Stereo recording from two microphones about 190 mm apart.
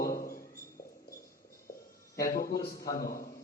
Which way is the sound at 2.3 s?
50° left (ahead or behind).